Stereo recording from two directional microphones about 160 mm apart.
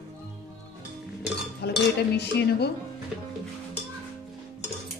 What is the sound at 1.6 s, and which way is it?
Cutlery, 90° left.